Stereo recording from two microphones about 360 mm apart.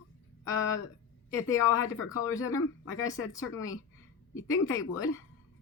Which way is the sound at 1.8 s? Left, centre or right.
Left.